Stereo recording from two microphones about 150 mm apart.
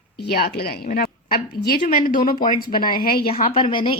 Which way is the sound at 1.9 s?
70° left (ahead or behind).